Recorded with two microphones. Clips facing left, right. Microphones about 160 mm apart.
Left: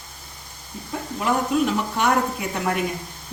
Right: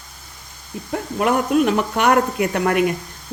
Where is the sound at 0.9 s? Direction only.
65° right (ahead or behind).